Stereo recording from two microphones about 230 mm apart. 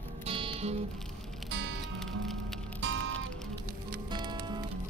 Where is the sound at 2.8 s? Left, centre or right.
Right.